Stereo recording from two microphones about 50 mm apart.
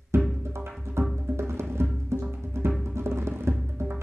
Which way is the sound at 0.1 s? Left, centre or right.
Right.